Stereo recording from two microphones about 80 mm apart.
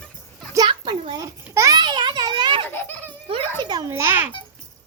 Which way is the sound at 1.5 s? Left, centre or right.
Right.